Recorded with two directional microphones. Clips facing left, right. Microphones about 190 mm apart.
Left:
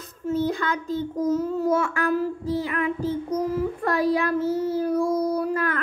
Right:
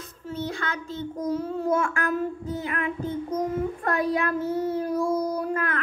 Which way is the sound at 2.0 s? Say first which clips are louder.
Left 3 dB; 35° left (ahead or behind).